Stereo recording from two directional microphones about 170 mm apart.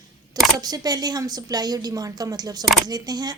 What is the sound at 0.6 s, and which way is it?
A woman's voice, 25° right (ahead or behind).